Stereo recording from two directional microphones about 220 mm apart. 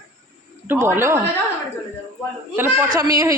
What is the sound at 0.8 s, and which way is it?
Speech, 10° right (ahead or behind).